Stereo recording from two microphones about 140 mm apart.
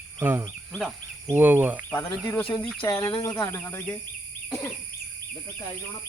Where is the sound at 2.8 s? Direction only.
35° left (ahead or behind).